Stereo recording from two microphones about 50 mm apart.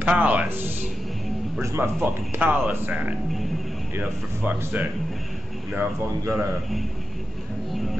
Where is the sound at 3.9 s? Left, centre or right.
Right.